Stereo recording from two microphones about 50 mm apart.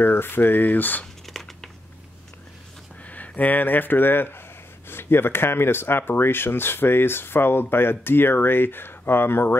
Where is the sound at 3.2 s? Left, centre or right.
Left.